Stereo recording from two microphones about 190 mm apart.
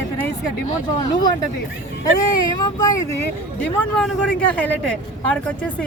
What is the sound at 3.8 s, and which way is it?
Speech, 5° left (ahead or behind).